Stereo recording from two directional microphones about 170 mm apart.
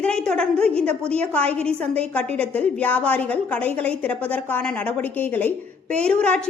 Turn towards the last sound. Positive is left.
turn(degrees=5)  # may be behind; listen again after turning